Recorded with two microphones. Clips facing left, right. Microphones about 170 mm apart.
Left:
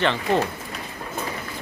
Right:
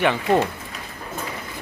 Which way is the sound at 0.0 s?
10° right (ahead or behind).